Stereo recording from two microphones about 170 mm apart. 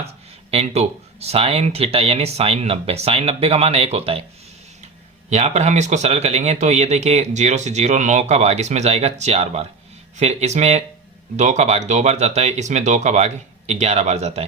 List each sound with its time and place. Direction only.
0.5 s speech: 40° right (ahead or behind)
5.3 s speech: 40° right (ahead or behind)